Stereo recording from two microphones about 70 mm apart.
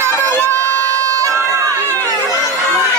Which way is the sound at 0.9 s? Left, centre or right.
Right.